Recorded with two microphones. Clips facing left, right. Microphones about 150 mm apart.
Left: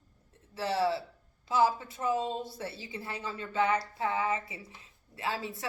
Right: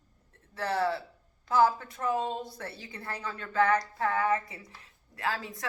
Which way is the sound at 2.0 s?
30° left (ahead or behind).